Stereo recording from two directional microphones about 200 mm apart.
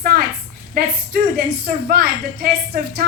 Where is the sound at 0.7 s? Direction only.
45° right (ahead or behind).